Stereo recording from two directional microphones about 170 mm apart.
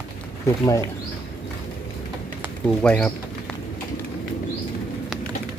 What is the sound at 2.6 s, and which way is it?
Speech, 5° left (ahead or behind).